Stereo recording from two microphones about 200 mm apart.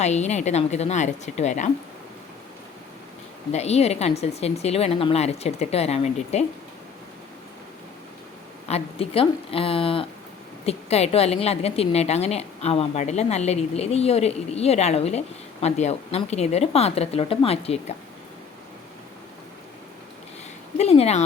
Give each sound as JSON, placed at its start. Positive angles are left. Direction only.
{"t": 0.0, "sound": "a woman's voice", "side_deg": 35}
{"t": 3.5, "sound": "a woman's voice", "side_deg": 30}
{"t": 8.6, "sound": "a woman's voice", "side_deg": 30}
{"t": 20.7, "sound": "a woman's voice", "side_deg": 30}